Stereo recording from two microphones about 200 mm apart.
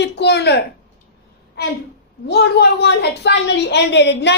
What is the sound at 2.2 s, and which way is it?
A woman's voice, 55° left (ahead or behind).